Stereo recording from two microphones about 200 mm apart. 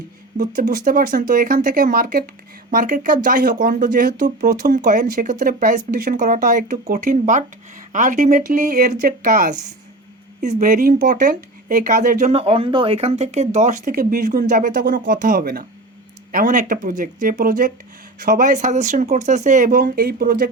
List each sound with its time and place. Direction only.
0.3 s speech: 45° right (ahead or behind)
12.4 s speech: 25° right (ahead or behind); by 20.5 s 45° right (ahead or behind)